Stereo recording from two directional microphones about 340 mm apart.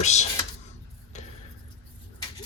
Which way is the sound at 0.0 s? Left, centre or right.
Centre.